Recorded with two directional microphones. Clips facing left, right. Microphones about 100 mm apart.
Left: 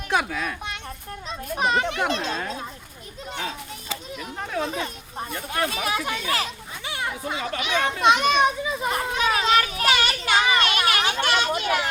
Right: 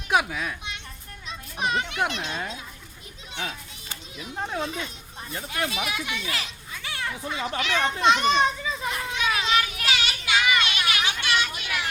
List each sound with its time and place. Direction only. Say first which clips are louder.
0.1 s a child's voice: right 1 dB; 10° right (ahead or behind)
1.5 s speech: left 3 dB; 40° left (ahead or behind)
4.6 s a child's voice: left 3 dB; 35° left (ahead or behind)
5.3 s speech: right 1 dB; 55° left (ahead or behind)
5.5 s speech: left 4 dB; 40° left (ahead or behind)
6.8 s children playing: left 3 dB; 20° left (ahead or behind)
7.6 s a child's voice: left 2 dB; 15° left (ahead or behind)
8.9 s children playing: left 4 dB; 40° left (ahead or behind)